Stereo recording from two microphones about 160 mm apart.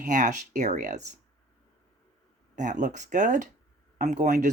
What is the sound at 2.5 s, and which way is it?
Speech, 50° right (ahead or behind).